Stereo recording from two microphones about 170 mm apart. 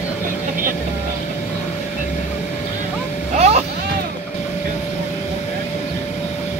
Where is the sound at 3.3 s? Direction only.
40° right (ahead or behind).